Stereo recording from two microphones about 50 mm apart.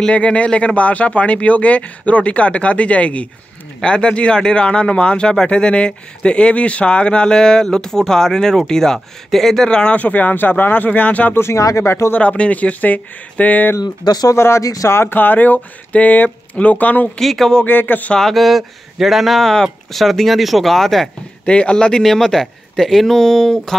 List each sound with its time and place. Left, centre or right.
0.1 s speech: left; by 9.7 s centre
9.7 s speech: centre
9.9 s speech: left
11.3 s speech: left
12.2 s speech: left
14.3 s speech: left
15.1 s speech: left
17.2 s speech: centre
17.6 s speech: left
18.1 s speech: centre
21.5 s speech: left